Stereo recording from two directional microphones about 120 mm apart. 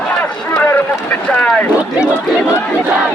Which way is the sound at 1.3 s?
10° left (ahead or behind).